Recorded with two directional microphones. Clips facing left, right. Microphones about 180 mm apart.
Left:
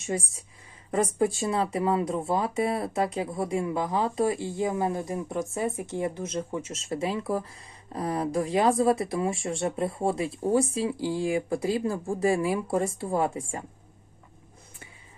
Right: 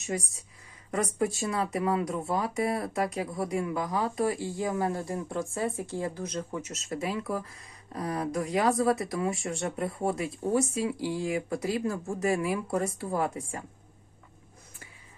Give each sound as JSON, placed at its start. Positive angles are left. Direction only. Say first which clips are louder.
{"t": 0.0, "sound": "speech", "louder": "left 2 dB", "side_deg": 25}